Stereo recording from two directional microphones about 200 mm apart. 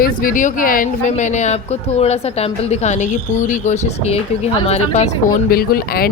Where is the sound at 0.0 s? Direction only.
45° left (ahead or behind).